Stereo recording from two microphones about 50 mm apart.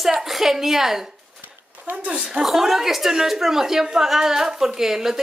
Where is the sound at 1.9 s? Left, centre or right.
Right; by 5.2 s centre.